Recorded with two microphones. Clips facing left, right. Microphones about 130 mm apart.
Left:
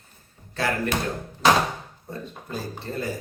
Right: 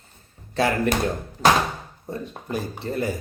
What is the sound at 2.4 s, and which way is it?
Speech, 15° right (ahead or behind).